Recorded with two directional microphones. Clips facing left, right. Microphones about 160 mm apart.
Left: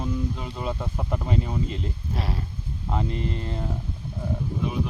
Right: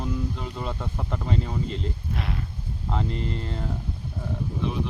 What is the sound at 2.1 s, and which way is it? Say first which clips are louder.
Speech: left 3 dB; 35° left (ahead or behind).